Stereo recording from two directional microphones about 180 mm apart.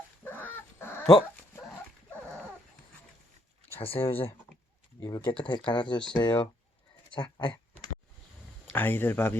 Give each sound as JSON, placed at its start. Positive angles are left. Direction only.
{"t": 0.3, "sound": "chicken", "side_deg": 10}
{"t": 1.1, "sound": "dog", "side_deg": 5}
{"t": 3.8, "sound": "speech", "side_deg": 30}
{"t": 4.9, "sound": "speech", "side_deg": 20}
{"t": 6.0, "sound": "speech", "side_deg": 5}
{"t": 6.2, "sound": "speech", "side_deg": 25}
{"t": 8.7, "sound": "speech", "side_deg": 10}